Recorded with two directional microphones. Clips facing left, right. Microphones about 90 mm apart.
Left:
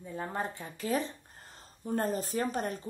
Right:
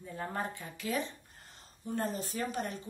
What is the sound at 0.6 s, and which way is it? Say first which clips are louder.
Speech: left 3 dB; 35° left (ahead or behind).